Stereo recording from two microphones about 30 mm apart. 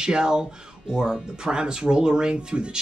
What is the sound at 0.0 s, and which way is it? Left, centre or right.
Speech, right.